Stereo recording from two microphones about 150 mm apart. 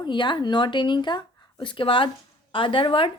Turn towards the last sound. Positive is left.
turn(degrees=35)  # may be behind; listen again after turning